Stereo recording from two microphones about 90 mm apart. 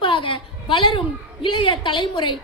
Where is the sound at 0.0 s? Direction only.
70° left (ahead or behind).